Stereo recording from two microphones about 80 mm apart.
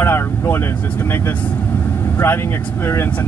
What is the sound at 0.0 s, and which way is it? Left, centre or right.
Vehicle, left.